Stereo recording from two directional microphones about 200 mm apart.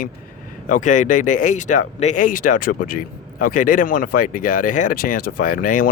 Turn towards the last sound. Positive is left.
turn(degrees=45)  # may be behind; listen again after turning